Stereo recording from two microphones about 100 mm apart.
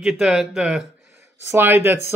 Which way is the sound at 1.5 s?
25° right (ahead or behind).